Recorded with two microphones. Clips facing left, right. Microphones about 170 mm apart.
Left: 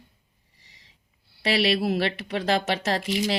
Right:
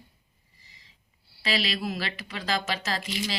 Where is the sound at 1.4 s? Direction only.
65° left (ahead or behind).